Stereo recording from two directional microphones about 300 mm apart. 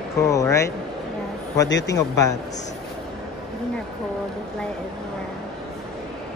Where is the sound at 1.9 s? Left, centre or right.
Centre.